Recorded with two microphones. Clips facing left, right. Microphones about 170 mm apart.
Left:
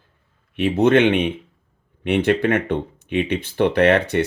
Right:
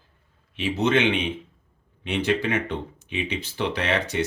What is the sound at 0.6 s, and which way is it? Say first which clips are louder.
Speech: left 7 dB; 55° left (ahead or behind).